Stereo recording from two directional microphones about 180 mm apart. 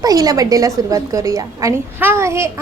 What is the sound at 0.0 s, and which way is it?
A woman's voice, 20° right (ahead or behind).